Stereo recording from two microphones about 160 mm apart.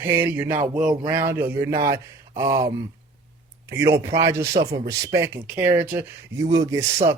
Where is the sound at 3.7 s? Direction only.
15° right (ahead or behind).